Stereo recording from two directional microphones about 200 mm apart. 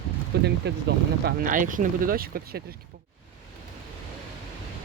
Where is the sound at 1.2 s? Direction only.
40° right (ahead or behind).